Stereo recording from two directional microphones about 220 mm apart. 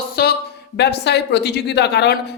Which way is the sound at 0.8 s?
50° left (ahead or behind).